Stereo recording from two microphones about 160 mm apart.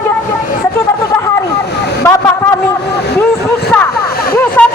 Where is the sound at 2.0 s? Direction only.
20° left (ahead or behind).